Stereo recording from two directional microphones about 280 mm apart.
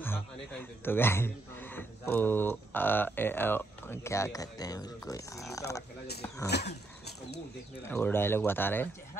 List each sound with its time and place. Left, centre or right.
0.8 s speech: centre
6.5 s a sound: left
7.8 s speech: centre